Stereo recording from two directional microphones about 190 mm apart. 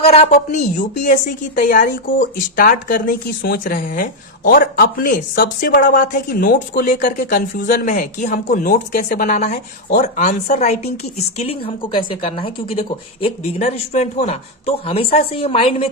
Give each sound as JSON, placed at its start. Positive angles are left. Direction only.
{"t": 0.0, "sound": "a woman's voice", "side_deg": 35}